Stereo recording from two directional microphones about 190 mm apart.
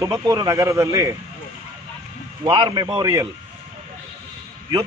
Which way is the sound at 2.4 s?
25° right (ahead or behind).